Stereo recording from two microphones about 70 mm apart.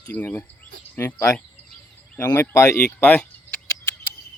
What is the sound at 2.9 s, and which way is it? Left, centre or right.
Speech, left.